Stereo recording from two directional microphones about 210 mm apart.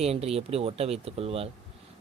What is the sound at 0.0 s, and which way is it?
A man's voice, 30° right (ahead or behind).